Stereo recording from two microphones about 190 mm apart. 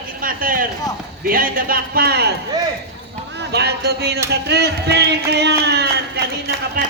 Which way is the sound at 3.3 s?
60° right (ahead or behind).